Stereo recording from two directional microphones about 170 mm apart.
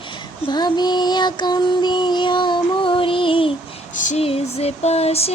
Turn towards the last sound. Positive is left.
turn(degrees=35)  # may be behind; listen again after turning